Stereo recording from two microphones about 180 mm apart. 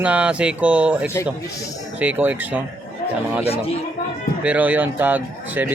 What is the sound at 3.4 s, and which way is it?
Speech, 35° left (ahead or behind).